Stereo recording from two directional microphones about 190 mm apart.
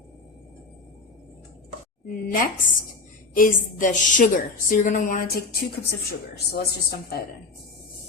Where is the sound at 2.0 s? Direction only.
50° left (ahead or behind).